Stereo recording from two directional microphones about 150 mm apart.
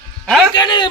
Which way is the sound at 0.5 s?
30° left (ahead or behind).